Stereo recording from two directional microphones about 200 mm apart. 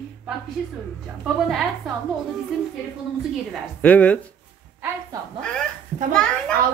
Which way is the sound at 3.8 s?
5° left (ahead or behind).